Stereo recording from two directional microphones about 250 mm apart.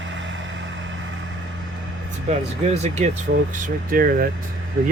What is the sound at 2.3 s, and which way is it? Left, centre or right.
Speech, right.